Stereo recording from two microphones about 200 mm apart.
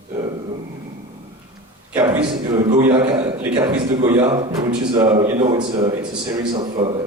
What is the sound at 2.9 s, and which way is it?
Speech, 30° right (ahead or behind).